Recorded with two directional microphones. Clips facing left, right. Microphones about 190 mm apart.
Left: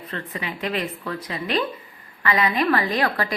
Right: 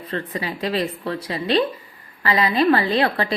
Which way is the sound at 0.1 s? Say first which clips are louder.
Right 5 dB; 35° right (ahead or behind).